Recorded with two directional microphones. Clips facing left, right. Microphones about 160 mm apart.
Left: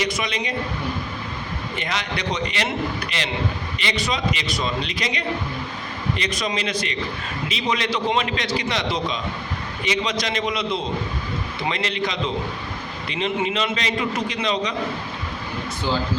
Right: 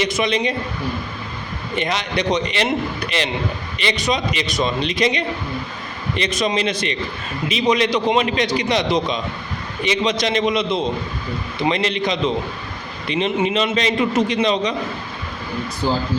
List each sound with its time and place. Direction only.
0.0 s a man's voice: 25° right (ahead or behind)
1.7 s a man's voice: 20° right (ahead or behind)
3.8 s a man's voice: 20° right (ahead or behind)
15.8 s speech: 40° right (ahead or behind)